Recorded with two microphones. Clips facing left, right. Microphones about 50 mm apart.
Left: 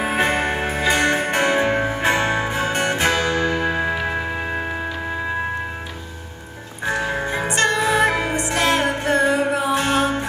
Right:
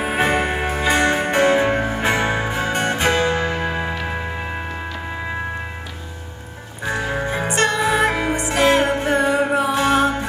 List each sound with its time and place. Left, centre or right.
0.0 s music: centre
0.3 s music: centre
1.5 s music: centre; by 3.6 s right
3.6 s music: centre
3.9 s music: centre
7.2 s music: centre